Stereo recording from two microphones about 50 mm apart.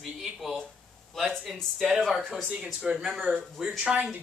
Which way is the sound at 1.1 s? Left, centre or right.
Centre.